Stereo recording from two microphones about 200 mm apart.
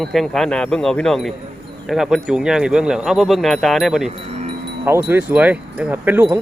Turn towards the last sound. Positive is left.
turn(degrees=-10)  # may be behind; listen again after turning